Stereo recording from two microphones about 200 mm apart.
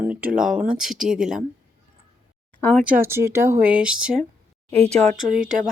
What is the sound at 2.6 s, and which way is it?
Speech, 10° left (ahead or behind).